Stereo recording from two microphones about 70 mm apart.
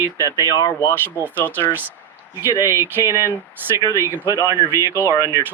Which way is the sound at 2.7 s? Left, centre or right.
Right.